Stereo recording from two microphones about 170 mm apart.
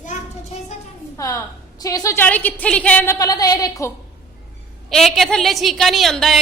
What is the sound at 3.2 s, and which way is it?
Female singing, 20° left (ahead or behind).